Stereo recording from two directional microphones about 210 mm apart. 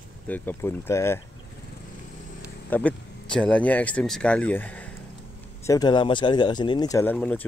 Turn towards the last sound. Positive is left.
turn(degrees=5)  # may be behind; listen again after turning